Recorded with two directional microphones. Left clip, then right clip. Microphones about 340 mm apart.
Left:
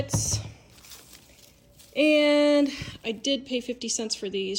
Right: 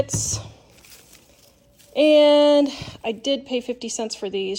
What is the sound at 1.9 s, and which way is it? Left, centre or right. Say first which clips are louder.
Music: right 6 dB; left.